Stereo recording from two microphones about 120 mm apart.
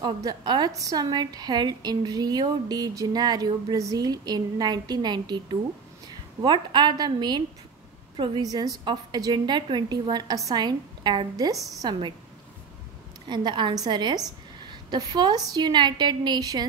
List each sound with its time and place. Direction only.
0.0 s a woman's voice: 35° right (ahead or behind)
13.3 s a woman's voice: 40° right (ahead or behind)